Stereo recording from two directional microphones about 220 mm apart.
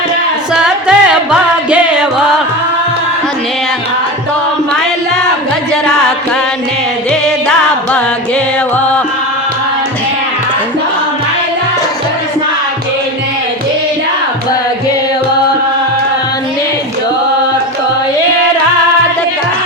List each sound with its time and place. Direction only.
0.6 s music: 5° right (ahead or behind)